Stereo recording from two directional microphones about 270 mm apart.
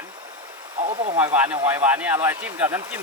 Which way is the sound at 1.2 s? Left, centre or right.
Centre.